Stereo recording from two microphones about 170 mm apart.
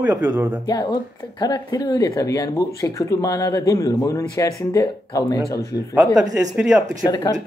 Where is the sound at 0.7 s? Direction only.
25° left (ahead or behind).